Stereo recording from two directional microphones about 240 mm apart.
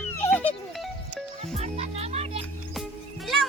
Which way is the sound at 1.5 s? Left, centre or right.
Right.